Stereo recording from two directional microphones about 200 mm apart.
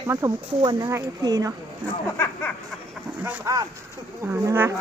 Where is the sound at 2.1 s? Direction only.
10° left (ahead or behind).